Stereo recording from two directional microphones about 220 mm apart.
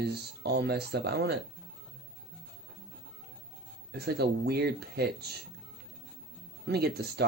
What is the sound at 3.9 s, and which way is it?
Speech, 45° right (ahead or behind).